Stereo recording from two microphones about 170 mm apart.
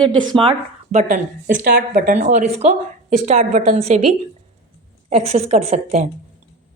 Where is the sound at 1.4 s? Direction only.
60° right (ahead or behind); by 6.0 s 40° right (ahead or behind).